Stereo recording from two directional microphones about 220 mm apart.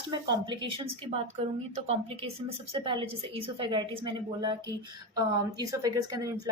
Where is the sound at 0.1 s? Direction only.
20° right (ahead or behind).